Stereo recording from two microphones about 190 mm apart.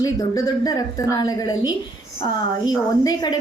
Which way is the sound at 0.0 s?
20° left (ahead or behind).